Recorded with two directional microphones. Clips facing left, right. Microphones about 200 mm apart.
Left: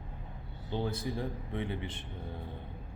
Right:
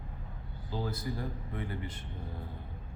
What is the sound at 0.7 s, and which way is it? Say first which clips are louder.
Speech: left 2 dB; 25° left (ahead or behind).